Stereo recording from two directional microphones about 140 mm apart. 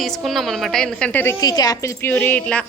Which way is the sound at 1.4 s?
30° left (ahead or behind).